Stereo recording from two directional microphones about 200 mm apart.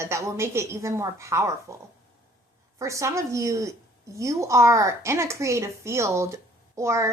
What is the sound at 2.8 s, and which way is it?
A woman's voice, 15° right (ahead or behind).